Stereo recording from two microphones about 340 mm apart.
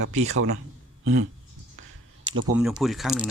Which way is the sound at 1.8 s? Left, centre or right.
Right.